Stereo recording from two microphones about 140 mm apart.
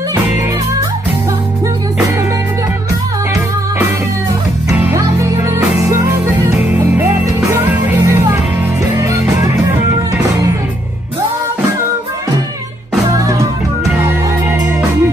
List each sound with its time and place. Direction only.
4.7 s music: 15° right (ahead or behind)
13.1 s music: 25° right (ahead or behind)